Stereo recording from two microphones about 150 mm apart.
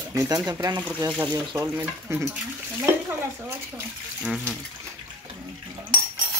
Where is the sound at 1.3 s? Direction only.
30° right (ahead or behind).